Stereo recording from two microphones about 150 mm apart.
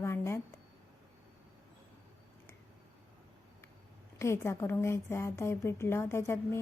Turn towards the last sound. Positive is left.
turn(degrees=15)  # may be behind; listen again after turning